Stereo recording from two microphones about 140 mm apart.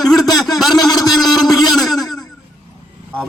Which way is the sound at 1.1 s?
Centre (ahead or behind).